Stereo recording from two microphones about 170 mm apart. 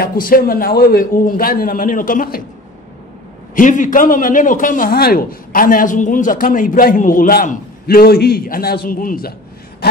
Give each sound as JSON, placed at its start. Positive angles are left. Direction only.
{"t": 0.0, "sound": "a man's voice", "side_deg": 60}
{"t": 3.5, "sound": "speech", "side_deg": 50}